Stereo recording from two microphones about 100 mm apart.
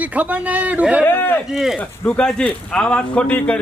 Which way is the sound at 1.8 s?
15° left (ahead or behind).